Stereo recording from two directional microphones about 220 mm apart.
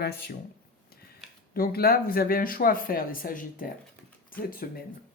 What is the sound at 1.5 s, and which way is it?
Speech, 45° left (ahead or behind).